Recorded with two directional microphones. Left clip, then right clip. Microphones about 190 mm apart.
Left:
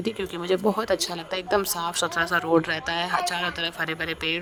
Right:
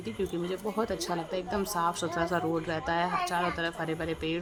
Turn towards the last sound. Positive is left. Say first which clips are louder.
# left 5 dB
turn(degrees=45)  # may be behind; listen again after turning